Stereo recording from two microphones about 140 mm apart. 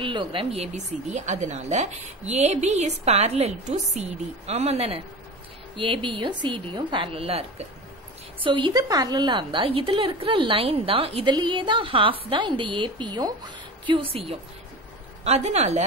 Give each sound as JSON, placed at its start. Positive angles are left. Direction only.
{"t": 0.0, "sound": "a woman's voice", "side_deg": -35}
{"t": 15.2, "sound": "speech", "side_deg": -50}